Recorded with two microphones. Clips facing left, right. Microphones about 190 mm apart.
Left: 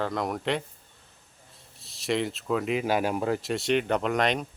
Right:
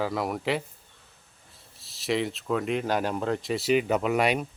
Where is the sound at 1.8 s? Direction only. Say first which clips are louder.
Even; centre (ahead or behind).